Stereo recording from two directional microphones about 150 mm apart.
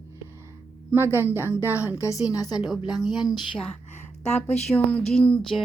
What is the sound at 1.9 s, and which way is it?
A woman's voice, 20° left (ahead or behind).